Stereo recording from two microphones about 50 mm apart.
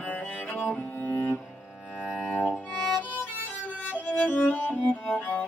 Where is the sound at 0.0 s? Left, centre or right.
Left.